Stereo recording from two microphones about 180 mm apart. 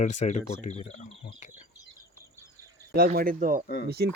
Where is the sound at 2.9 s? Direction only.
55° right (ahead or behind).